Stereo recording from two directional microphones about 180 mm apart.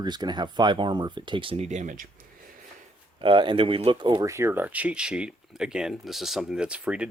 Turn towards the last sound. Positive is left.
turn(degrees=-5)  # may be behind; listen again after turning